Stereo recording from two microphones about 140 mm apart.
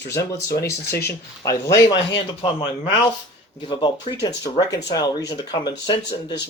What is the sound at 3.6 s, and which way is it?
Speech, 30° left (ahead or behind).